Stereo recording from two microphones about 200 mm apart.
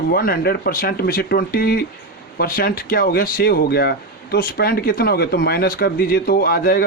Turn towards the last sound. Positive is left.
turn(degrees=50)  # may be behind; listen again after turning